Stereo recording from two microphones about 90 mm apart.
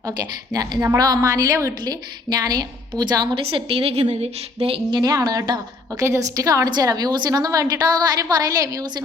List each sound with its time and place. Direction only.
0.5 s a woman's voice: 45° right (ahead or behind)
1.8 s a woman's voice: 50° right (ahead or behind)
3.5 s a woman's voice: 80° right
4.6 s speech: 90° right
5.2 s a woman's voice: 45° right (ahead or behind)